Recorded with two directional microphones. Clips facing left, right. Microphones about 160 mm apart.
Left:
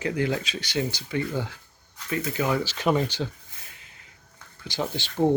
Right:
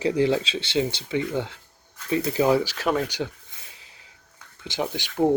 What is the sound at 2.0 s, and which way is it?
Speech, 30° right (ahead or behind).